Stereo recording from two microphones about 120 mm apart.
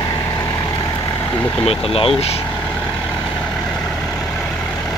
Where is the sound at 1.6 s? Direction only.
55° left (ahead or behind).